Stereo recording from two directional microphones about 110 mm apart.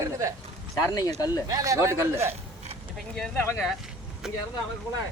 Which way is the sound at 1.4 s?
30° right (ahead or behind).